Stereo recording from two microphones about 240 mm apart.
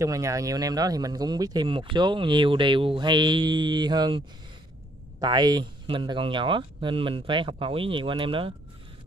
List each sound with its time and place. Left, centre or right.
0.0 s speech: centre
5.2 s speech: centre